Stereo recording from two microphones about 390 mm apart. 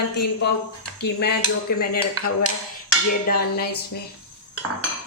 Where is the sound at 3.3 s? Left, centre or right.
Left.